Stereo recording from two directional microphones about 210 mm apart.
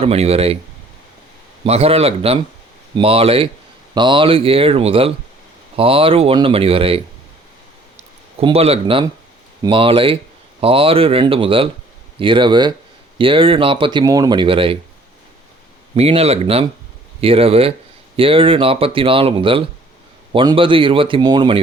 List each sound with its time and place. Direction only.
0.0 s speech: 30° right (ahead or behind)
1.6 s speech: 30° right (ahead or behind)
8.4 s speech: 30° right (ahead or behind)
16.0 s speech: 30° right (ahead or behind)